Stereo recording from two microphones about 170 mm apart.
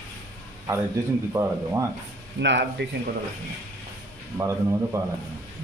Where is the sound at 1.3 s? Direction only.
15° right (ahead or behind).